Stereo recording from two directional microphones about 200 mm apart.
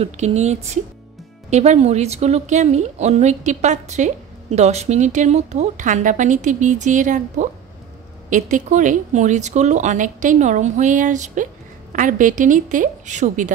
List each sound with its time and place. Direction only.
0.0 s a woman's voice: 35° right (ahead or behind)